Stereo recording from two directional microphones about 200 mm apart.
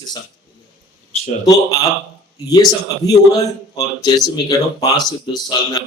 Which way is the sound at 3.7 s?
20° left (ahead or behind).